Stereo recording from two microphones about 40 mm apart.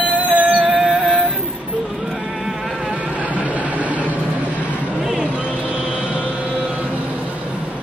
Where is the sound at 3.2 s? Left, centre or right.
Right.